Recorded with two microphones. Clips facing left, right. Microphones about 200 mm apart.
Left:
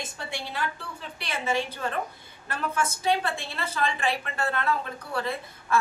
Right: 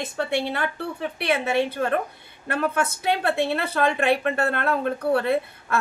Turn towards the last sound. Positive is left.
turn(degrees=-60)  # may be behind; listen again after turning